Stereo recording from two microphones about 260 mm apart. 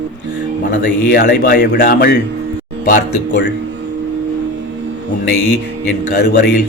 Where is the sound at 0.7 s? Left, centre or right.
Left.